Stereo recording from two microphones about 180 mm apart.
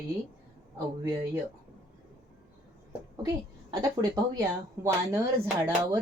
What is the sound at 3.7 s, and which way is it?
A woman's voice, 20° right (ahead or behind).